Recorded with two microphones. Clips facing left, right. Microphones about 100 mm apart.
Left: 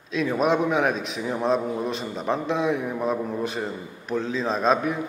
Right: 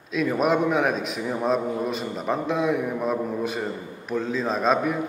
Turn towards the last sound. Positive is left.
turn(degrees=0)  # may be behind; listen again after turning